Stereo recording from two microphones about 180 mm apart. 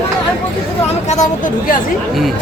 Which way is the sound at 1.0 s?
40° left (ahead or behind).